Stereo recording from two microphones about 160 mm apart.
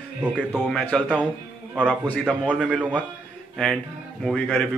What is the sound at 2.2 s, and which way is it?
A man's voice, 5° right (ahead or behind).